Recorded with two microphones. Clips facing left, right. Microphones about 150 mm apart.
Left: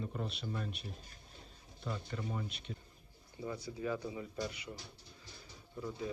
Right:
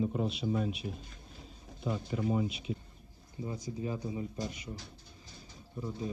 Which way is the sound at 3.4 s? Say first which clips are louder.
Right 2 dB; 25° right (ahead or behind).